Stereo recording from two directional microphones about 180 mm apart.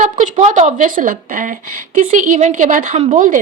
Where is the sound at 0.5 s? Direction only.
45° right (ahead or behind).